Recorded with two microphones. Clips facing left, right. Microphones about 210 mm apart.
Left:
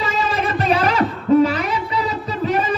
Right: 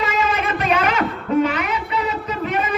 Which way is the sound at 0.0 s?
35° left (ahead or behind).